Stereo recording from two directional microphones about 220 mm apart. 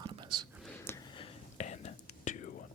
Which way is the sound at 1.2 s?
30° left (ahead or behind).